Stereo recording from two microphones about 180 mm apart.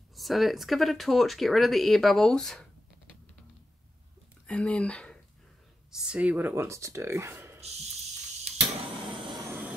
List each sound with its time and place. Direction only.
0.1 s speech: centre (ahead or behind)
4.5 s speech: 5° left (ahead or behind)
5.9 s speech: 5° right (ahead or behind)
9.1 s vehicle: 25° right (ahead or behind)
9.5 s vehicle: 10° right (ahead or behind)